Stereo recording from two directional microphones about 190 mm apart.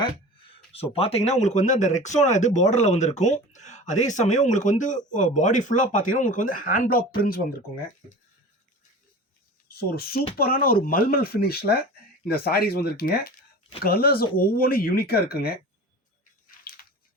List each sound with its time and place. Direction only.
0.7 s speech: 30° left (ahead or behind); by 7.4 s 50° left (ahead or behind)
9.6 s speech: 55° left (ahead or behind)
16.5 s a sound: 50° left (ahead or behind)